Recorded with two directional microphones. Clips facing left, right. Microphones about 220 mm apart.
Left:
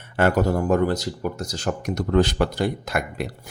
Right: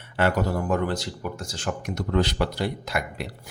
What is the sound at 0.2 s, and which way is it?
Speech, 45° left (ahead or behind).